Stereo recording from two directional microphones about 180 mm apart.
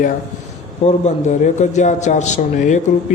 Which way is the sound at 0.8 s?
40° left (ahead or behind).